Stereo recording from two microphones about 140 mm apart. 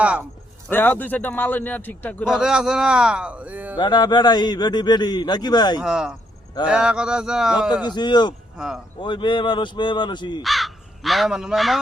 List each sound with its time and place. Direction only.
0.0 s speech: 10° right (ahead or behind)
0.7 s a man's voice: 15° left (ahead or behind)
2.2 s speech: 5° right (ahead or behind)
3.8 s a man's voice: 30° left (ahead or behind)
5.8 s speech: 5° right (ahead or behind)
7.9 s a man's voice: 30° left (ahead or behind)
8.5 s speech: 5° right (ahead or behind)
9.0 s a man's voice: 35° left (ahead or behind)
10.4 s speech: centre (ahead or behind)